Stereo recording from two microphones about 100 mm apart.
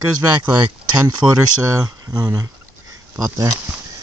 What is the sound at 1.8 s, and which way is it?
Speech, 40° right (ahead or behind).